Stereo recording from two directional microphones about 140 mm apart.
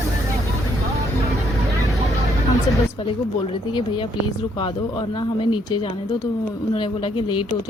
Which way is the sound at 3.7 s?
35° left (ahead or behind).